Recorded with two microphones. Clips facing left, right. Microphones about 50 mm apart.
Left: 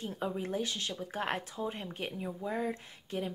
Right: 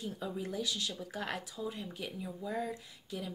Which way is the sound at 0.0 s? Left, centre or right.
Left.